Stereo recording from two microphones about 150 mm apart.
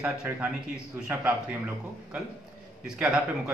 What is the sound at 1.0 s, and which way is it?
Speech, 10° right (ahead or behind).